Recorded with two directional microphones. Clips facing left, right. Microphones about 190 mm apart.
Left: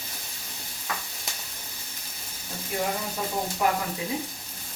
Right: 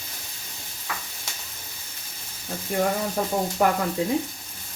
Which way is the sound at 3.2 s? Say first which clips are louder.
Right 5 dB; 50° right (ahead or behind).